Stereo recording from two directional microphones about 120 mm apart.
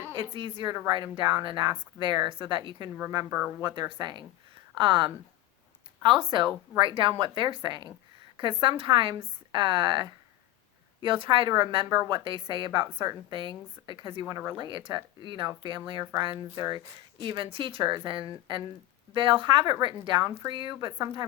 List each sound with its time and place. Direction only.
0.2 s a woman's voice: 45° right (ahead or behind)
3.2 s speech: 10° right (ahead or behind)
3.9 s a woman's voice: 40° right (ahead or behind)
16.2 s a woman's voice: 40° right (ahead or behind)